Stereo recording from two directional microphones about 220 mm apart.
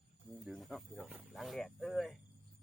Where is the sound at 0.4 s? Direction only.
Centre (ahead or behind).